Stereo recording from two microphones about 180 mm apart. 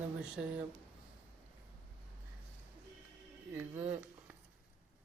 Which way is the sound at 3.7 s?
35° right (ahead or behind).